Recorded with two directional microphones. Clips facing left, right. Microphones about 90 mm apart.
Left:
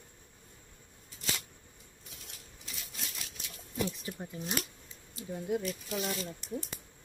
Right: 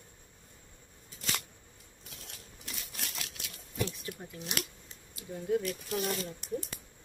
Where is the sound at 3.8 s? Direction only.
20° left (ahead or behind).